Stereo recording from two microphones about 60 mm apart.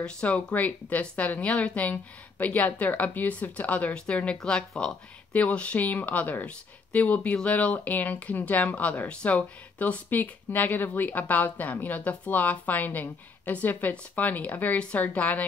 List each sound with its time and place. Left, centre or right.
0.0 s speech: centre